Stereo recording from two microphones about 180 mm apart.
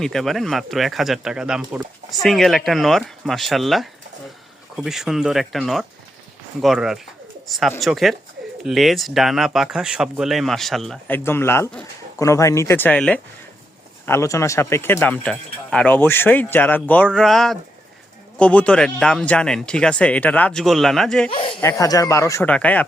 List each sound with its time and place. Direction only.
0.0 s speech: centre (ahead or behind)
11.2 s speech: 15° left (ahead or behind)
21.2 s speech: 30° left (ahead or behind)
21.6 s speech: 15° left (ahead or behind)